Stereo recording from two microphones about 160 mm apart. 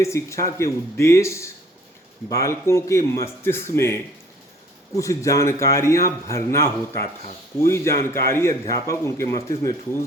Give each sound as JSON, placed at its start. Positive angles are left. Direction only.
{"t": 0.0, "sound": "a man's voice", "side_deg": 20}